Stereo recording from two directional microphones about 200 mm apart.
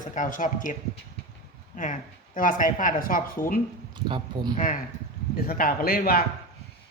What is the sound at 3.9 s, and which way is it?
Speech, 25° right (ahead or behind).